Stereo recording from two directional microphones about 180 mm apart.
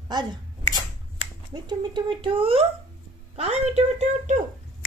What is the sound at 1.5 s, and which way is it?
A woman's voice, 25° right (ahead or behind).